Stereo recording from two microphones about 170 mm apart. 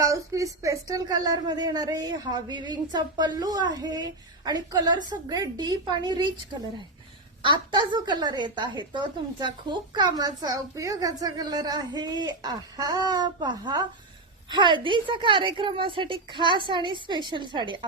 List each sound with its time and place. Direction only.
0.0 s a woman's voice: 20° right (ahead or behind)